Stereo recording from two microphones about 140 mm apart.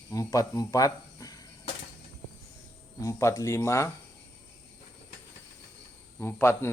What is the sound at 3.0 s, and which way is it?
Speech, 20° left (ahead or behind).